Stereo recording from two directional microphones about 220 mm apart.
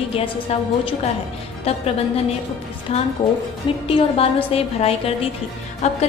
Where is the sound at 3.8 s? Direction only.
25° left (ahead or behind).